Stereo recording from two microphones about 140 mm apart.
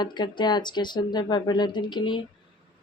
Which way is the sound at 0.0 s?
30° left (ahead or behind).